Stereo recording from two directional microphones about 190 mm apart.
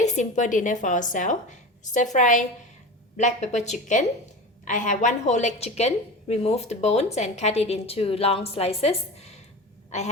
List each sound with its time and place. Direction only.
0.0 s a woman's voice: 40° left (ahead or behind)